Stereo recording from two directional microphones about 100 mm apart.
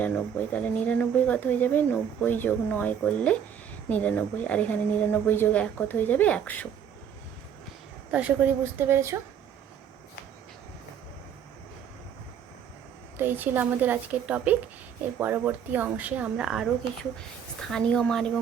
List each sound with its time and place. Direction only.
0.0 s speech: 15° left (ahead or behind)
8.1 s a woman's voice: 15° right (ahead or behind)
13.1 s speech: 20° right (ahead or behind)
17.6 s speech: 5° left (ahead or behind)